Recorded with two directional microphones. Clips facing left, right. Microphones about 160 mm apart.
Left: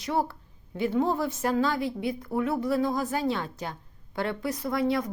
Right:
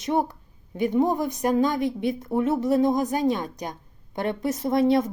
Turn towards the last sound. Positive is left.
turn(degrees=-25)  # may be behind; listen again after turning